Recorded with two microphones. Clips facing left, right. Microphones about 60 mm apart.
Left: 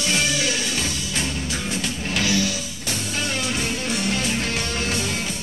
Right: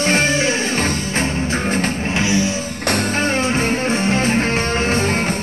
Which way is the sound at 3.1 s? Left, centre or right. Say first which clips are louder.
Right 8 dB; right.